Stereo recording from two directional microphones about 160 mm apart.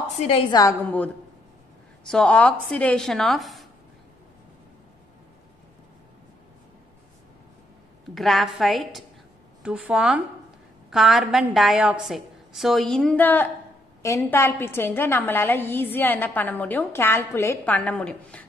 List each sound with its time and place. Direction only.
0.5 s a woman's voice: 20° left (ahead or behind)
2.0 s a woman's voice: 5° left (ahead or behind)
8.1 s a woman's voice: centre (ahead or behind)